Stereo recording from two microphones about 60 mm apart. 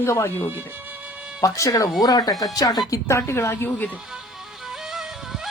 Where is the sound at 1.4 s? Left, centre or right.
Left.